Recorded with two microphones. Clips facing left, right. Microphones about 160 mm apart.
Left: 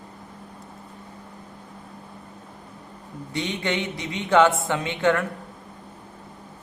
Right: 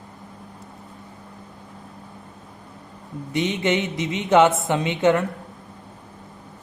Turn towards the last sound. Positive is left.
turn(degrees=-20)  # may be behind; listen again after turning